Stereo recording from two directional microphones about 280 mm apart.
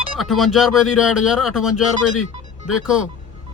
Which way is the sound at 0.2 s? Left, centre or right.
Centre.